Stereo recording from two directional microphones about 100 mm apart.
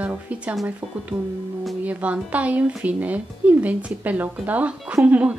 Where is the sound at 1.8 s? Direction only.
15° right (ahead or behind).